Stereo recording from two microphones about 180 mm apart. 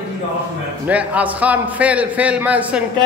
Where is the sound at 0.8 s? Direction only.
10° right (ahead or behind).